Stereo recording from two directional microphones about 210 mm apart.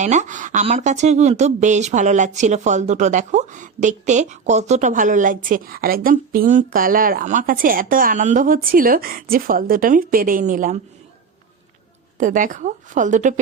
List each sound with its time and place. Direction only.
0.0 s speech: 35° right (ahead or behind)
12.1 s speech: 35° right (ahead or behind)